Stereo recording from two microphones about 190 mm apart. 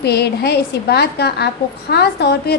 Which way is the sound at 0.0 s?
60° left (ahead or behind).